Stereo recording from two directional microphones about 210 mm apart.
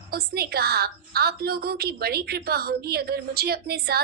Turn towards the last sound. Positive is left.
turn(degrees=-50)  # may be behind; listen again after turning